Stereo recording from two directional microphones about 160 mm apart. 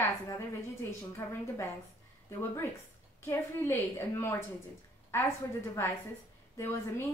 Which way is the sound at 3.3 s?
15° left (ahead or behind).